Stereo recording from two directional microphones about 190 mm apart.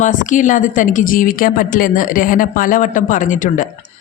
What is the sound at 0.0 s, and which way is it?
A woman's voice, 40° left (ahead or behind).